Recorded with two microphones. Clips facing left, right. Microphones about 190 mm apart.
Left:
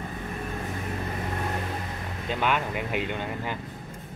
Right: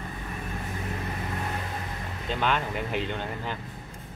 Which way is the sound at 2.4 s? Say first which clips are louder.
Left 1 dB; 10° left (ahead or behind).